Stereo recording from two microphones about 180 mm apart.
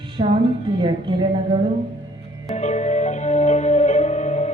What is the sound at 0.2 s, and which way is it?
Speech, 30° right (ahead or behind).